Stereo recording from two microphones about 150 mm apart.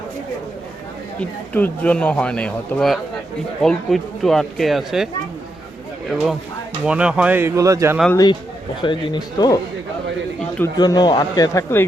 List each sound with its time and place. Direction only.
1.2 s speech: 10° left (ahead or behind)
6.8 s speech: 5° right (ahead or behind)
8.1 s a man's voice: 25° left (ahead or behind)
10.8 s a man's voice: 25° left (ahead or behind)